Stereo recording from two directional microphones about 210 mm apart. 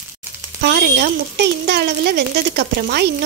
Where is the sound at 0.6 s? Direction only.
50° right (ahead or behind).